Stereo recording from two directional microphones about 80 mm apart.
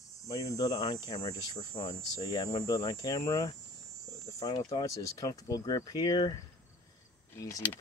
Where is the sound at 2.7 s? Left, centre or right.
Left.